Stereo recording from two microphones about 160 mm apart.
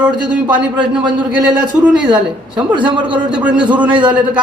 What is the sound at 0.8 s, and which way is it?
Speech, 30° right (ahead or behind).